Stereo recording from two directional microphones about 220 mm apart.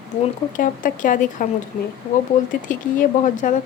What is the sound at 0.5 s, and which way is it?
Speech, 35° left (ahead or behind).